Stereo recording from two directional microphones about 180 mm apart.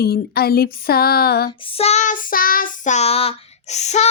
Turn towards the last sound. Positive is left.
turn(degrees=40)  # may be behind; listen again after turning